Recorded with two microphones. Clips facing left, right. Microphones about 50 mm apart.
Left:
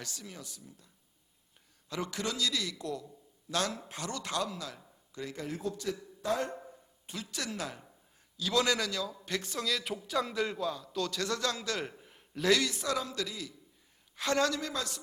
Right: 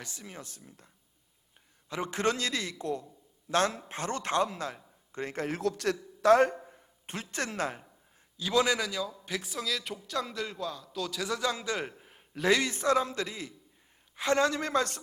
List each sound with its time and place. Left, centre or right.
0.0 s speech: right
1.9 s a man's voice: right
5.5 s a man's voice: right
7.1 s a man's voice: right
8.4 s a man's voice: centre
12.0 s a sound: centre
12.5 s a man's voice: right
14.6 s speech: right